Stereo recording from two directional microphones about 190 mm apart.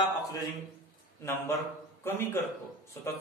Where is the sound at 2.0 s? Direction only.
15° left (ahead or behind).